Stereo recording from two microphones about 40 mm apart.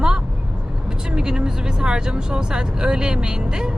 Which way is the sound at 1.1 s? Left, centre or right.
Centre.